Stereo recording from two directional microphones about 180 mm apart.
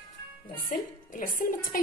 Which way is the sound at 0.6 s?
50° left (ahead or behind).